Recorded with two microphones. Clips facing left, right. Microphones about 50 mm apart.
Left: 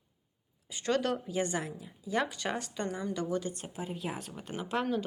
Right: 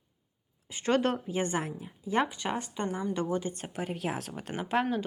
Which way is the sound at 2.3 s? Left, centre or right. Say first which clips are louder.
Right 2 dB; centre.